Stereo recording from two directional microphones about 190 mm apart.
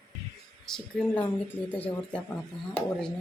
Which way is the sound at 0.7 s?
10° left (ahead or behind).